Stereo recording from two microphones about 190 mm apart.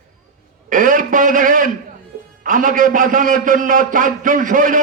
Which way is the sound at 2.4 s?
45° right (ahead or behind).